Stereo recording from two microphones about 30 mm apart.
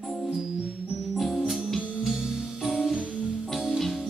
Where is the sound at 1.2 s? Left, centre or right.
Centre.